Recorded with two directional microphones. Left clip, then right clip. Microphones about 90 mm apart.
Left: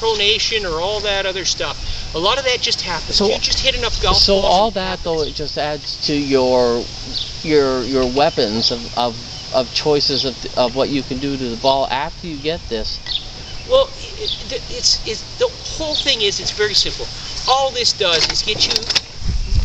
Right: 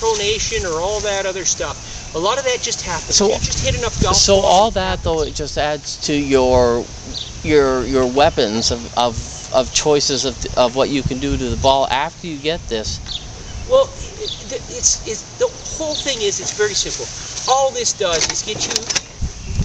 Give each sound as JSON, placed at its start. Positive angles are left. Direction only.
{"t": 0.2, "sound": "speech", "side_deg": -5}
{"t": 4.3, "sound": "speech", "side_deg": -35}
{"t": 13.7, "sound": "speech", "side_deg": -5}